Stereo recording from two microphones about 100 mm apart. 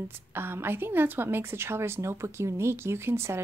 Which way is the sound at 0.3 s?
25° right (ahead or behind).